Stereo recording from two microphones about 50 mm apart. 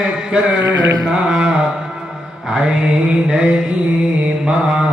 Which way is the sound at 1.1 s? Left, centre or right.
Centre.